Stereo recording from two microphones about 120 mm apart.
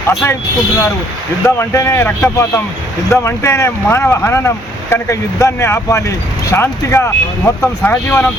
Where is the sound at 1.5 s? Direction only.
25° left (ahead or behind).